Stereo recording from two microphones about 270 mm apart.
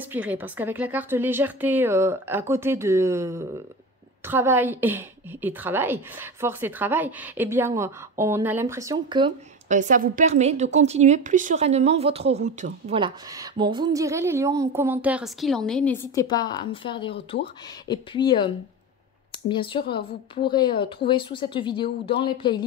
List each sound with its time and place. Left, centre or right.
0.0 s a woman's voice: centre
19.5 s speech: centre